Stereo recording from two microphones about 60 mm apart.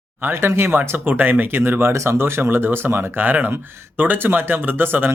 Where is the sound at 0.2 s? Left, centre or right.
Right.